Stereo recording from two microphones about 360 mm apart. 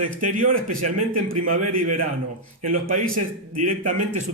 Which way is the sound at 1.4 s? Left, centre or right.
Right.